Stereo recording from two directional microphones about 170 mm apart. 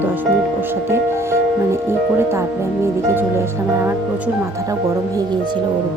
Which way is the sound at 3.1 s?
15° right (ahead or behind).